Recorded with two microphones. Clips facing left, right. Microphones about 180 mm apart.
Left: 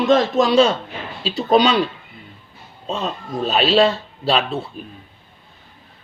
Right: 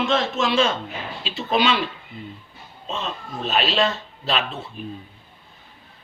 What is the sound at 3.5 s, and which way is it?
Speech, 30° left (ahead or behind).